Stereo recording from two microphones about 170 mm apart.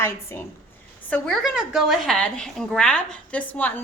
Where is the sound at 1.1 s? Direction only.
Centre (ahead or behind).